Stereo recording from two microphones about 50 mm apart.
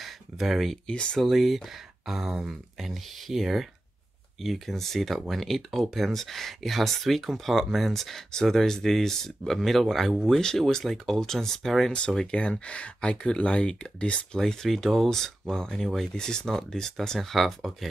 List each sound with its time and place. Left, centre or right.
0.0 s a sound: centre
1.1 s speech: centre
12.2 s speech: centre
14.4 s speech: centre